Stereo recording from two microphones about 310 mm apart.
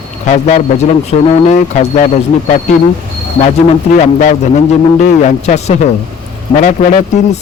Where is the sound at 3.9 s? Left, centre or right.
Left.